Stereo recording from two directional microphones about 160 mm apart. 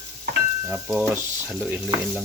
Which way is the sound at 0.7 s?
15° right (ahead or behind).